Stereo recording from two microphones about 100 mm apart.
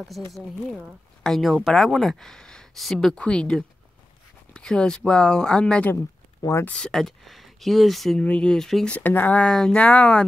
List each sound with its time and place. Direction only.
0.3 s speech: centre (ahead or behind)
5.9 s a sound: 30° left (ahead or behind)
6.6 s speech: 10° left (ahead or behind)
8.9 s speech: 20° left (ahead or behind)